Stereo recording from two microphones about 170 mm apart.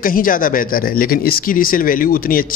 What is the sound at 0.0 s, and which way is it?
A man's voice, 55° left (ahead or behind).